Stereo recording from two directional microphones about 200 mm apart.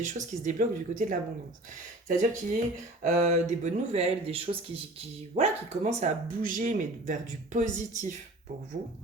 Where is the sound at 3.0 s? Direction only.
35° right (ahead or behind).